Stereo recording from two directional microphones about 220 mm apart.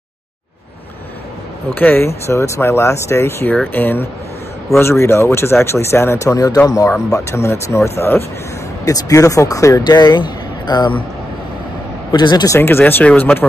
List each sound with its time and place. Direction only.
1.8 s a man's voice: 10° left (ahead or behind)
12.1 s speech: 20° left (ahead or behind)